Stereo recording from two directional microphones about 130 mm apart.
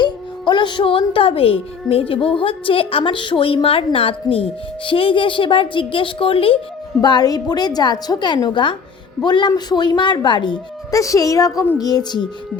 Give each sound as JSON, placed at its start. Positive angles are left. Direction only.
{"t": 0.0, "sound": "music", "side_deg": 35}
{"t": 2.2, "sound": "a woman's voice", "side_deg": 45}
{"t": 7.0, "sound": "a woman's voice", "side_deg": 30}
{"t": 10.9, "sound": "a woman's voice", "side_deg": 25}